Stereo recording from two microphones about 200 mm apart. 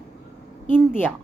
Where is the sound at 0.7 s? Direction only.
10° left (ahead or behind).